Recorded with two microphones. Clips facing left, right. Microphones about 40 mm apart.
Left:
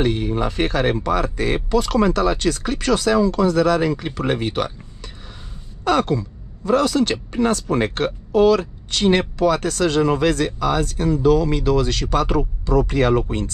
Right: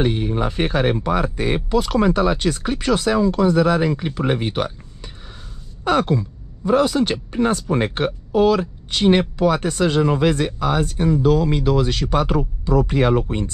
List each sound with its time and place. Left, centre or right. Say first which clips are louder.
0.0 s speech: even; centre
4.0 s speech: right 1 dB; centre
5.9 s speech: even; centre